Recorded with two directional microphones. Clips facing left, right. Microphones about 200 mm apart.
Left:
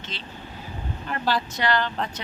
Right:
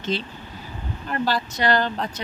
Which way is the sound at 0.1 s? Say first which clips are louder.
Right 14 dB; 40° right (ahead or behind).